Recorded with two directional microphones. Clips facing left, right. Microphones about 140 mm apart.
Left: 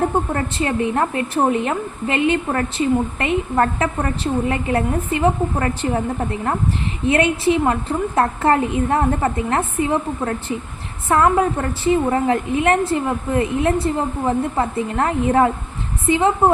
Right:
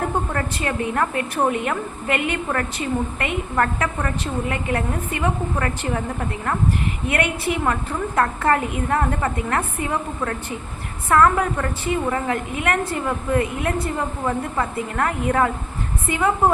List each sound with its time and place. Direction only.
0.3 s a woman's voice: 25° left (ahead or behind)
7.1 s a woman's voice: 30° left (ahead or behind)